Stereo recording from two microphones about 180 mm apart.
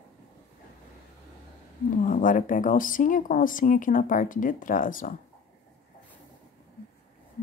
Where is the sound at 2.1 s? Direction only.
50° left (ahead or behind).